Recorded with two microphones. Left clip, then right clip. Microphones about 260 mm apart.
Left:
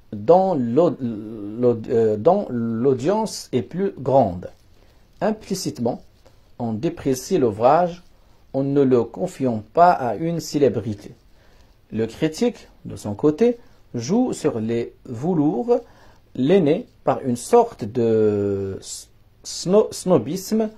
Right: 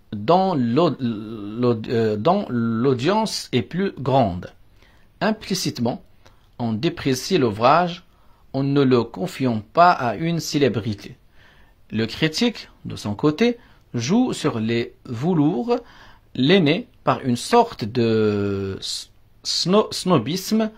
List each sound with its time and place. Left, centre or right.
0.1 s speech: right
7.5 s speech: right
8.5 s speech: right